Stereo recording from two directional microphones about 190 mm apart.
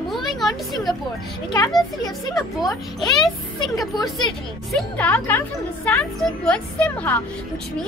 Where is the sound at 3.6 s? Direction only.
20° left (ahead or behind).